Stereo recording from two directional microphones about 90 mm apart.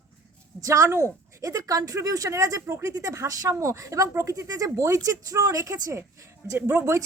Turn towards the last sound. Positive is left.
turn(degrees=-30)  # may be behind; listen again after turning